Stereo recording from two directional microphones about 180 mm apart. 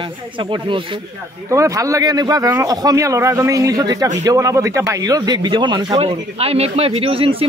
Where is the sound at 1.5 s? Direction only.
15° right (ahead or behind).